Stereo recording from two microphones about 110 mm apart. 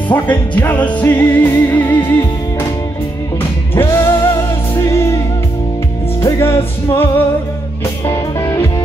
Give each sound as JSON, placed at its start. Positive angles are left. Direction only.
{"t": 0.1, "sound": "music", "side_deg": 15}
{"t": 3.7, "sound": "music", "side_deg": 25}
{"t": 6.4, "sound": "music", "side_deg": 25}
{"t": 8.1, "sound": "music", "side_deg": 30}